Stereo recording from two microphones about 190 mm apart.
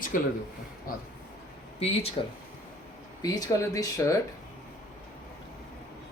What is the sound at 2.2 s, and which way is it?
Speech, 30° left (ahead or behind).